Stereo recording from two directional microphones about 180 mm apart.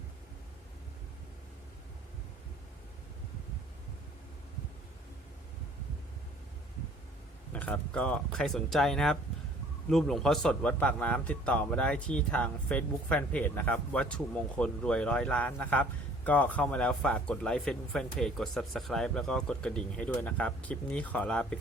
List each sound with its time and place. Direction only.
7.5 s speech: 10° left (ahead or behind)